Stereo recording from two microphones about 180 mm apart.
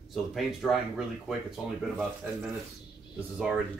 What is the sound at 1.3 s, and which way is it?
Speech, centre (ahead or behind).